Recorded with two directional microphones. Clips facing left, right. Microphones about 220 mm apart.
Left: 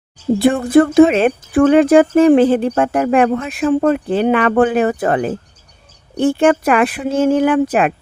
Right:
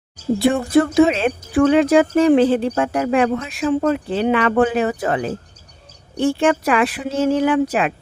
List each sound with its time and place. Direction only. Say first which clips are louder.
0.5 s speech: left 4 dB; 50° left (ahead or behind)